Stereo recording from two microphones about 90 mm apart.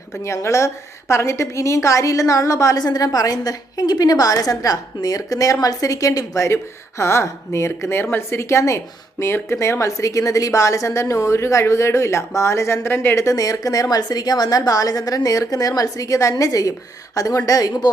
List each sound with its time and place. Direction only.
0.2 s a woman's voice: 35° left (ahead or behind)